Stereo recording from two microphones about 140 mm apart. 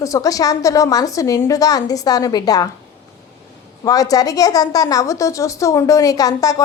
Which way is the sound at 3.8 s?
25° left (ahead or behind).